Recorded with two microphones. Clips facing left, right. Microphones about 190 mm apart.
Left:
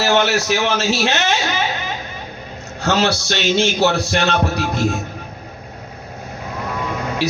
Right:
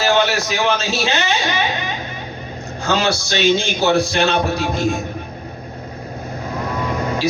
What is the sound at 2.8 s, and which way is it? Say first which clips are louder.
A man's voice: left 1 dB; 65° left (ahead or behind).